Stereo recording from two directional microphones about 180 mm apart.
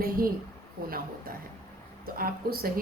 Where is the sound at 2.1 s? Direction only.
55° right (ahead or behind).